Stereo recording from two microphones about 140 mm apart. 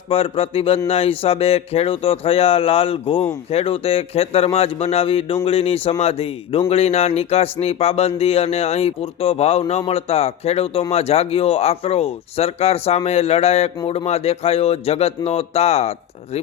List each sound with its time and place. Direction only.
0.1 s speech: 40° left (ahead or behind)